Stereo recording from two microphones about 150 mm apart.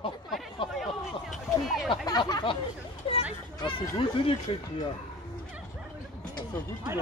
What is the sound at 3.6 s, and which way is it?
Speech, 35° left (ahead or behind).